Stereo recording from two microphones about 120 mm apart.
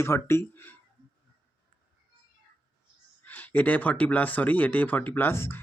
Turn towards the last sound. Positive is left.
turn(degrees=20)  # may be behind; listen again after turning